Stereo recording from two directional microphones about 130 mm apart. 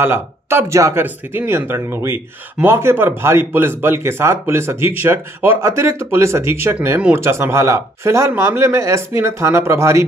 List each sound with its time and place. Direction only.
0.0 s speech: 20° right (ahead or behind)